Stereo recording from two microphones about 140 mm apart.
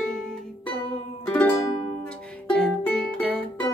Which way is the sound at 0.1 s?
5° left (ahead or behind).